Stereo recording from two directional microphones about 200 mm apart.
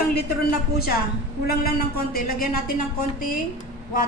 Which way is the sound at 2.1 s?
45° left (ahead or behind).